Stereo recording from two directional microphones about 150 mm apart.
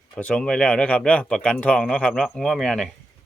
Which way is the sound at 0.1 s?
10° left (ahead or behind).